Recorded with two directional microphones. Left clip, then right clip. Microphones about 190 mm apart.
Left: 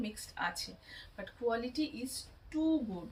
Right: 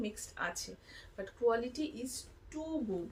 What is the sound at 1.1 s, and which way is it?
Speech, 20° right (ahead or behind).